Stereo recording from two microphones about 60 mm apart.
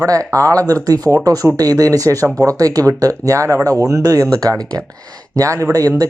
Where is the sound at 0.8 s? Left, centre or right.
Right.